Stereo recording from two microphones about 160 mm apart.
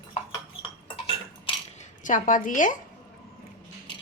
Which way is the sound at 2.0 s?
55° left (ahead or behind).